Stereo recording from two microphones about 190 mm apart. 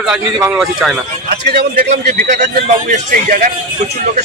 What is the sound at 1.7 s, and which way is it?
A man's voice, 45° right (ahead or behind).